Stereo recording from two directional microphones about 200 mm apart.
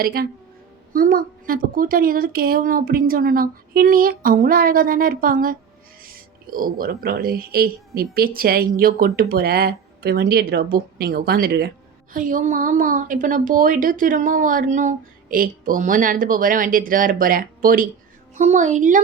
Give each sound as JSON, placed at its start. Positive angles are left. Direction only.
{"t": 0.0, "sound": "a woman's voice", "side_deg": -50}